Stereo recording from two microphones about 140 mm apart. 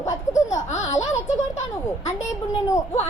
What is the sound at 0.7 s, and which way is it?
Speech, 55° left (ahead or behind).